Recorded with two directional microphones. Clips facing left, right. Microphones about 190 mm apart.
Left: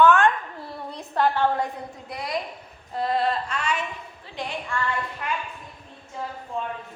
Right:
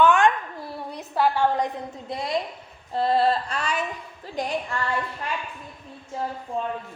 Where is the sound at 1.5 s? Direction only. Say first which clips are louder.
Right 2 dB; 20° right (ahead or behind); by 4.5 s 40° right (ahead or behind).